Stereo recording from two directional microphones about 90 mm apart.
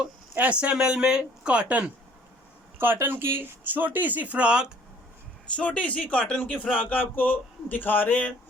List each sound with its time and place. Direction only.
0.3 s speech: 15° right (ahead or behind)
5.5 s speech: 15° left (ahead or behind)